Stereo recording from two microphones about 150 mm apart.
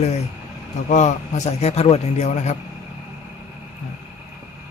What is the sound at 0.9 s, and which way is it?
A man's voice, 50° left (ahead or behind).